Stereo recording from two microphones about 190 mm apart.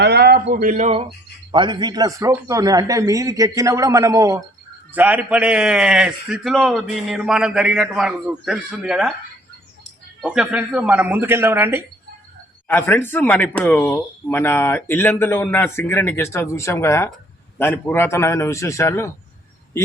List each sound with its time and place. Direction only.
0.0 s a man's voice: 60° right (ahead or behind); by 9.1 s 5° right (ahead or behind)
10.2 s a man's voice: 5° right (ahead or behind)
12.6 s speech: 10° left (ahead or behind)